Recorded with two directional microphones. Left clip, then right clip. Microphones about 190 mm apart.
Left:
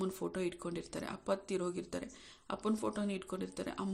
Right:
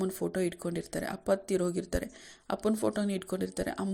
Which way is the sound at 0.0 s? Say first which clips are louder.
Right 6 dB; 20° right (ahead or behind).